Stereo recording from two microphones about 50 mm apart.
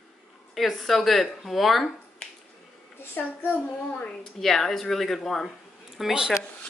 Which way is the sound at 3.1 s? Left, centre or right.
Left.